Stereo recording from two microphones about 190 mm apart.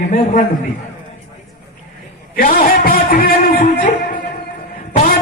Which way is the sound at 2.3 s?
45° left (ahead or behind).